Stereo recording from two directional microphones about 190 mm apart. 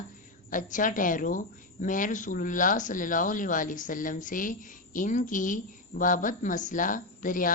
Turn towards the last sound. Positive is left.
turn(degrees=45)  # may be behind; listen again after turning